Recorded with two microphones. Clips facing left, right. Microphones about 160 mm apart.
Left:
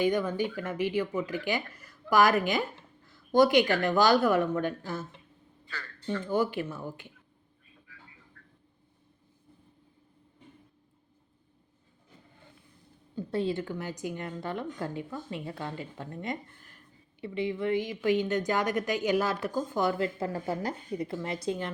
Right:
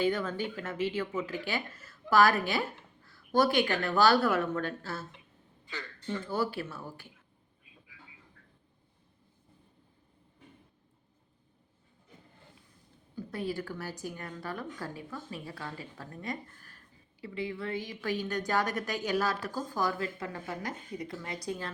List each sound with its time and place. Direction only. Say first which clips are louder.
0.0 s speech: left 3 dB; 15° left (ahead or behind)
3.1 s a sound: left 5 dB; 20° left (ahead or behind)
3.8 s speech: left 2 dB; 20° left (ahead or behind)
6.2 s speech: left 5 dB; 15° left (ahead or behind)
8.4 s a sound: left 3 dB; 15° right (ahead or behind)
13.1 s speech: left 5 dB; 25° left (ahead or behind)